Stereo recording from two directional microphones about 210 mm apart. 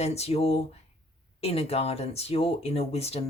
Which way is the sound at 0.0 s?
30° left (ahead or behind).